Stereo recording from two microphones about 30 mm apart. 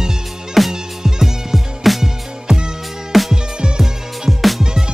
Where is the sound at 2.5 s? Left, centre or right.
Centre.